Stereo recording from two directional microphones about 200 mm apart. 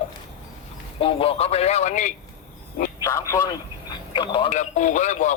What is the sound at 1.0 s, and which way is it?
Speech, 30° left (ahead or behind).